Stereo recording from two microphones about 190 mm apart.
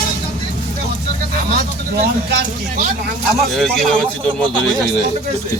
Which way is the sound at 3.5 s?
Centre (ahead or behind).